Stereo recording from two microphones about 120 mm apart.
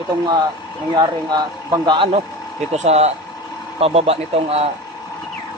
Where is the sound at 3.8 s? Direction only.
55° right (ahead or behind).